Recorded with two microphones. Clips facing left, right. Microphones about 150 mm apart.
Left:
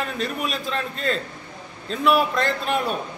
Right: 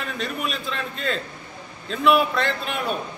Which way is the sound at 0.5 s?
40° left (ahead or behind).